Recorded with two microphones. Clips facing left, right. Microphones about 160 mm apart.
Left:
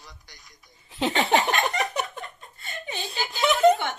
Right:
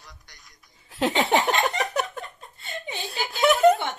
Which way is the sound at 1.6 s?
Centre (ahead or behind).